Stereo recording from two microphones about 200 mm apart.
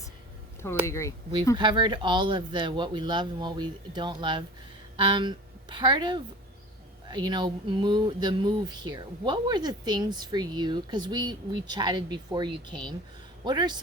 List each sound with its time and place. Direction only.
0.9 s speech: 15° left (ahead or behind)
1.5 s a woman's voice: 25° right (ahead or behind)